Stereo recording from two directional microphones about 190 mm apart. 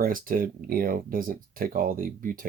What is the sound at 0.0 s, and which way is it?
Speech, 50° right (ahead or behind).